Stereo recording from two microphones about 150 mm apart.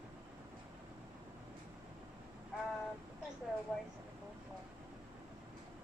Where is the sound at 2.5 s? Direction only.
Centre (ahead or behind).